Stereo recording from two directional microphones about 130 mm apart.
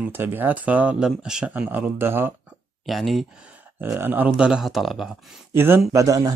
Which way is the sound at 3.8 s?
15° right (ahead or behind).